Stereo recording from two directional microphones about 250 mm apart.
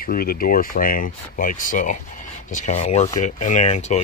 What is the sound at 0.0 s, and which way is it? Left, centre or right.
Speech, left.